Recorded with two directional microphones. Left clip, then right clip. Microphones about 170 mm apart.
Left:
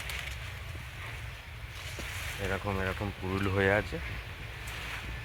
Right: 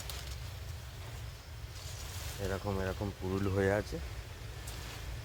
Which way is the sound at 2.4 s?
15° left (ahead or behind).